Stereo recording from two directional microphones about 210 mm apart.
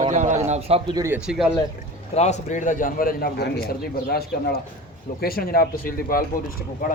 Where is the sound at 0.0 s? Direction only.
35° right (ahead or behind).